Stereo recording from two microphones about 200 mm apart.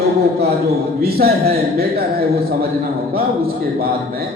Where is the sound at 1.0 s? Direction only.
50° right (ahead or behind).